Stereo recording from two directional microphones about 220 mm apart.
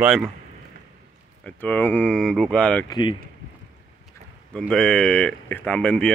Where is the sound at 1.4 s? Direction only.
10° left (ahead or behind).